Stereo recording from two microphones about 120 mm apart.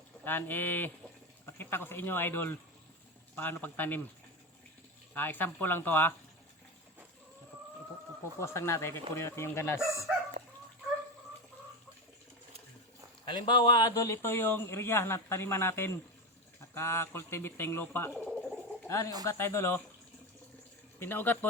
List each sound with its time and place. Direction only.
0.3 s speech: 15° left (ahead or behind)
5.1 s speech: 15° left (ahead or behind)
8.4 s speech: 20° left (ahead or behind)
13.3 s speech: 40° left (ahead or behind); by 18.1 s 20° left (ahead or behind)
18.1 s a sound: 5° left (ahead or behind)
18.9 s speech: 25° left (ahead or behind)
21.0 s speech: 15° left (ahead or behind)